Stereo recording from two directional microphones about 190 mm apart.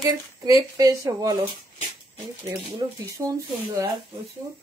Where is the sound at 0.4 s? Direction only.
20° right (ahead or behind).